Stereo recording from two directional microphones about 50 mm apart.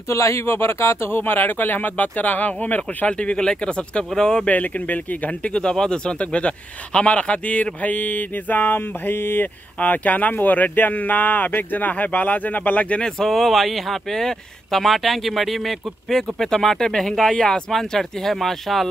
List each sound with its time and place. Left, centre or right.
0.1 s speech: left
3.1 s speech: left
4.5 s speech: left
9.8 s speech: left
13.0 s speech: centre
16.2 s speech: centre